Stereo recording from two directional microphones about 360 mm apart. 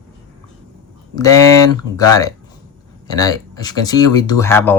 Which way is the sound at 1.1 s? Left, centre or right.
Centre.